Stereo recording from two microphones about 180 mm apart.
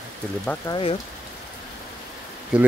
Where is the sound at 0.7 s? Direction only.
30° left (ahead or behind).